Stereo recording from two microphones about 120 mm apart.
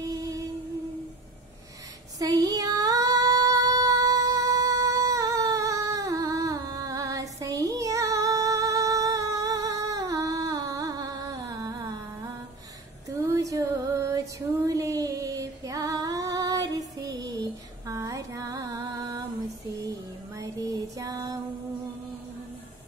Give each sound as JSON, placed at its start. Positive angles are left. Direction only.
{"t": 2.1, "sound": "female singing", "side_deg": -30}
{"t": 13.3, "sound": "music", "side_deg": -30}
{"t": 14.7, "sound": "female singing", "side_deg": -30}
{"t": 19.9, "sound": "music", "side_deg": -30}